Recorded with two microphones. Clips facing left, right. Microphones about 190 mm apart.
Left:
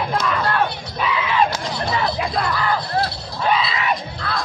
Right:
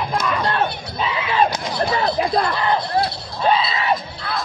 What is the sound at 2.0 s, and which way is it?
Music, 30° right (ahead or behind).